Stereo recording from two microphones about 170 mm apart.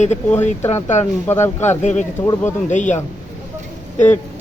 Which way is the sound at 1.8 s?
45° left (ahead or behind).